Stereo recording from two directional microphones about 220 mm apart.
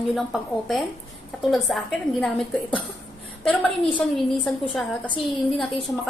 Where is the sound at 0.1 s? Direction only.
Centre (ahead or behind).